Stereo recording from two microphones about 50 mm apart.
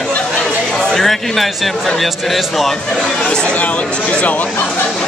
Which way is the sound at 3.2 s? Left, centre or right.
Centre.